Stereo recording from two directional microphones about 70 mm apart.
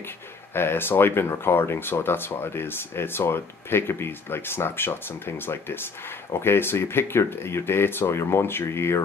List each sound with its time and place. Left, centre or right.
0.6 s speech: left